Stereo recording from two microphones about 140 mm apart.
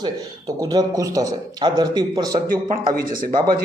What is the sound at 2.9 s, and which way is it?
Speech, 85° right.